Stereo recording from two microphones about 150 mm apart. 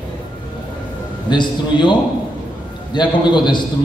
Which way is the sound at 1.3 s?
30° left (ahead or behind).